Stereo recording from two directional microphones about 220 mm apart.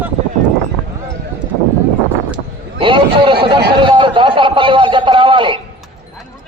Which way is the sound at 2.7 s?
20° right (ahead or behind).